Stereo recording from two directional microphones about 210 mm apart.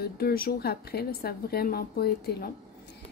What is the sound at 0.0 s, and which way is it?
Speech, 45° left (ahead or behind).